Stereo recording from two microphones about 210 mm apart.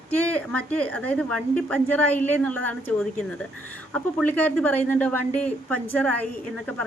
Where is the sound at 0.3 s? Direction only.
5° left (ahead or behind).